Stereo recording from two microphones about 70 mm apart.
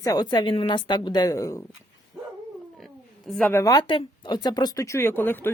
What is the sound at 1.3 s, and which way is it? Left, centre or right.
Speech, left.